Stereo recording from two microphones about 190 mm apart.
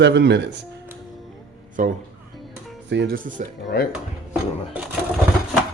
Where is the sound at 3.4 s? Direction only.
40° right (ahead or behind).